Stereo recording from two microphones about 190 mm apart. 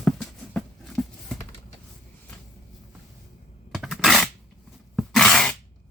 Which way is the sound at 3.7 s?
Centre (ahead or behind).